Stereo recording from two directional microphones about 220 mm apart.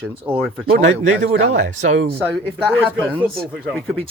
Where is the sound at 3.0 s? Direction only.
5° left (ahead or behind).